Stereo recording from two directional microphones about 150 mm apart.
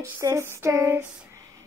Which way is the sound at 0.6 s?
15° right (ahead or behind).